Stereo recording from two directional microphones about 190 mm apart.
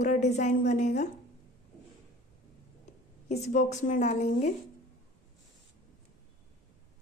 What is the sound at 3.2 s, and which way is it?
A woman's voice, 35° left (ahead or behind).